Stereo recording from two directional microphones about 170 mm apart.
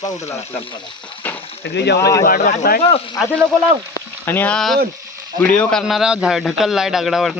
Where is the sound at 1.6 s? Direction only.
85° left.